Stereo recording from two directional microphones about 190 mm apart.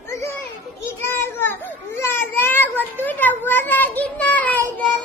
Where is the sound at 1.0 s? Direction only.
10° left (ahead or behind).